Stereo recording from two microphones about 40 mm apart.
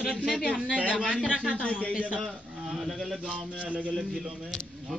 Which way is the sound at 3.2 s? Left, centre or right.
Right.